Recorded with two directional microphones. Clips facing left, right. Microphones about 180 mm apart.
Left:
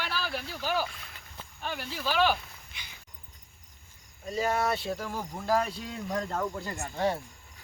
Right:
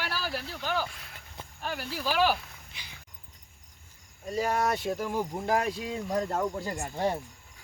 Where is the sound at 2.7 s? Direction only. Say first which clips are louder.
Left 1 dB; 35° right (ahead or behind).